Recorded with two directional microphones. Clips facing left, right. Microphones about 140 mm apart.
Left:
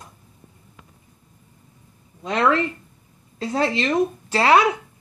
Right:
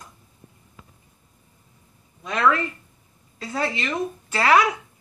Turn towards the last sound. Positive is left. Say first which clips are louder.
# left 2 dB
turn(degrees=25)  # may be behind; listen again after turning